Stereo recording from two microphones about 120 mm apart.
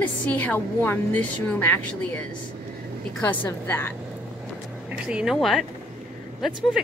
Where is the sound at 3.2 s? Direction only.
15° left (ahead or behind).